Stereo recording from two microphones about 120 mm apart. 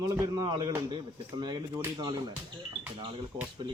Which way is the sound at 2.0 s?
35° right (ahead or behind).